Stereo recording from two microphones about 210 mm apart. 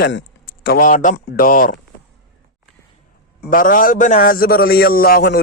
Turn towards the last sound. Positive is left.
turn(degrees=45)  # may be behind; listen again after turning